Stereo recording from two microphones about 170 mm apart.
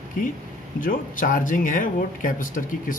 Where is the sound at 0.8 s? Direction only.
55° left (ahead or behind).